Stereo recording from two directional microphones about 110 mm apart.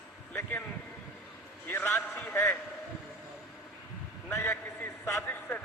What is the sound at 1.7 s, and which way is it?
Speech, 20° left (ahead or behind).